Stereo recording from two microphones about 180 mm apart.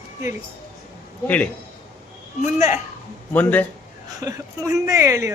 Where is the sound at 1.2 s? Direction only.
10° left (ahead or behind).